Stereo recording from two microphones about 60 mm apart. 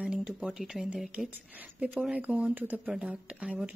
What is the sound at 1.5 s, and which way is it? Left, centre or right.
Speech, right.